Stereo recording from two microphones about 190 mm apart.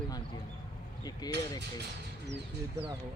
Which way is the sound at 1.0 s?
20° left (ahead or behind).